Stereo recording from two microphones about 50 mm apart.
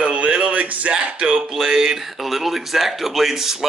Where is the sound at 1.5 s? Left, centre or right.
Centre.